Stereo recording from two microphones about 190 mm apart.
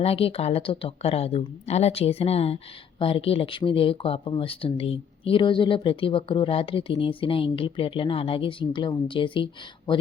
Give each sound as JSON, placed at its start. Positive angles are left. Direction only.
{"t": 0.0, "sound": "a woman's voice", "side_deg": 30}